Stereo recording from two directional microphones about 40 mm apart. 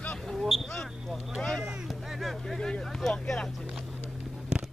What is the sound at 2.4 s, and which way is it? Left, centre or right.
Speech, centre.